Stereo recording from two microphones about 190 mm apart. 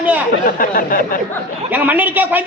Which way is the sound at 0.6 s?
45° left (ahead or behind).